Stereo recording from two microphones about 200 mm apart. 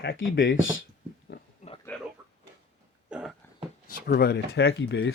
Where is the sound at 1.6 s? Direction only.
35° left (ahead or behind).